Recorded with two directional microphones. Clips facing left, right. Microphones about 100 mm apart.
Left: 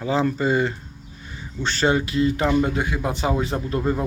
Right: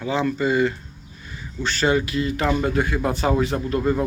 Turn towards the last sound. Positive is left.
turn(degrees=25)  # may be behind; listen again after turning